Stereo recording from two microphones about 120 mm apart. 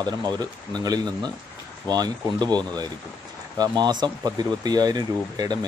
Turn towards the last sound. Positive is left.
turn(degrees=-35)  # may be behind; listen again after turning